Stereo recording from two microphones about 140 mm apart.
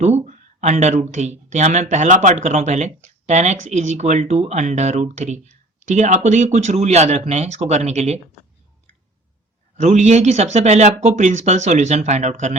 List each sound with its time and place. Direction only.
0.0 s speech: 55° right (ahead or behind)
9.7 s speech: 55° right (ahead or behind)